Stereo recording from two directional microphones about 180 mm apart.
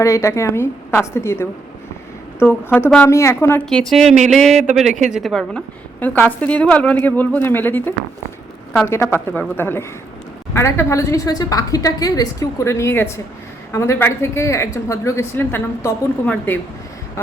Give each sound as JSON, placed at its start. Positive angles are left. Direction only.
{"t": 0.0, "sound": "speech", "side_deg": 15}
{"t": 3.7, "sound": "a woman's voice", "side_deg": 5}